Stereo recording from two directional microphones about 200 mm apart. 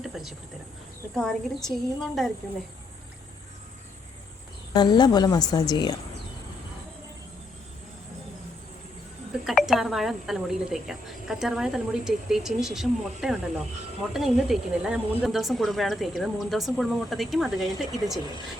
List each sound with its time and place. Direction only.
0.0 s a sound: centre (ahead or behind)
1.1 s a woman's voice: centre (ahead or behind)
4.7 s a woman's voice: 20° left (ahead or behind)
9.4 s a woman's voice: centre (ahead or behind)